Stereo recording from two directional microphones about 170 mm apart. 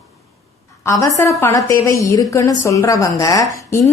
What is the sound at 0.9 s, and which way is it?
A woman's voice, 20° left (ahead or behind).